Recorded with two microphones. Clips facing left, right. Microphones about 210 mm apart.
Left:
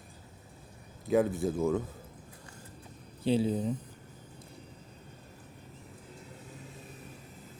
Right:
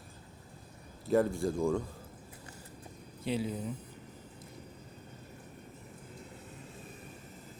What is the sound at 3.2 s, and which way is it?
Speech, 30° left (ahead or behind).